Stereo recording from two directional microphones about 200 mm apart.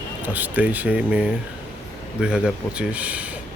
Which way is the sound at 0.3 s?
10° right (ahead or behind).